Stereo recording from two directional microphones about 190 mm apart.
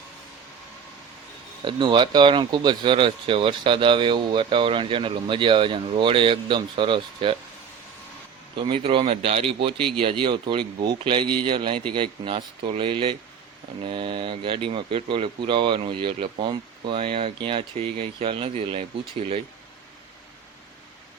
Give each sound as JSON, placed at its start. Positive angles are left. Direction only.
{"t": 1.6, "sound": "speech", "side_deg": -25}
{"t": 8.5, "sound": "speech", "side_deg": -30}